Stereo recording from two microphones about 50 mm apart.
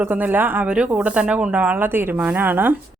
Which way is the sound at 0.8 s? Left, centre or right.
Right.